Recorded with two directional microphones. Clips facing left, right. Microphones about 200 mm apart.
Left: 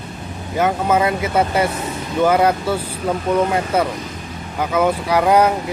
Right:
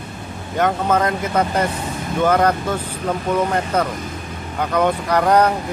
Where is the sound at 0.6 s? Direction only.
5° left (ahead or behind).